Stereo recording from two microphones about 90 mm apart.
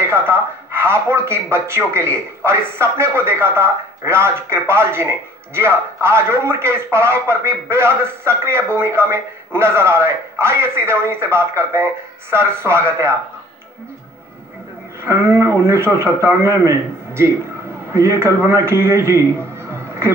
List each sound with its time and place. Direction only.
0.0 s speech: 30° right (ahead or behind)
15.0 s a man's voice: 30° right (ahead or behind)